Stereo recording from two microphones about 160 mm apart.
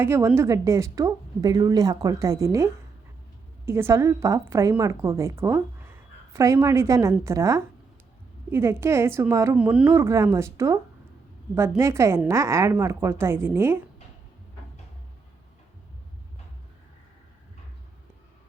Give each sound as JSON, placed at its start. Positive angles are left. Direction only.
{"t": 0.0, "sound": "a woman's voice", "side_deg": -15}
{"t": 3.7, "sound": "a woman's voice", "side_deg": -15}
{"t": 11.8, "sound": "a woman's voice", "side_deg": -20}